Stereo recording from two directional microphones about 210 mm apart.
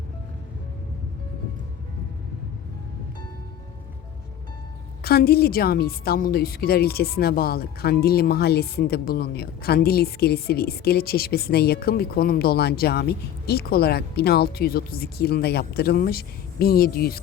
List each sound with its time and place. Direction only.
5.0 s a woman's voice: 45° left (ahead or behind)